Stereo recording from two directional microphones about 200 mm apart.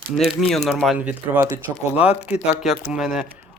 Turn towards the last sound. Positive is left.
turn(degrees=0)  # may be behind; listen again after turning